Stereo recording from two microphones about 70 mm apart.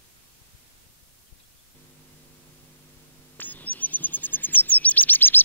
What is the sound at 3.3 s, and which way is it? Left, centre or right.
Chirp, left.